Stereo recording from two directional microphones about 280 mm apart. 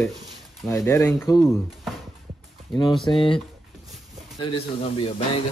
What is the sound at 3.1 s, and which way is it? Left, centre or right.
Speech, centre.